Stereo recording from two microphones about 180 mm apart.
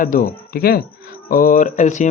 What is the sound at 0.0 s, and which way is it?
Speech, 50° left (ahead or behind).